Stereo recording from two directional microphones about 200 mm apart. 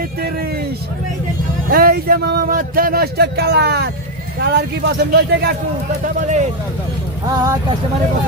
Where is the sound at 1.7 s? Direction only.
50° right (ahead or behind).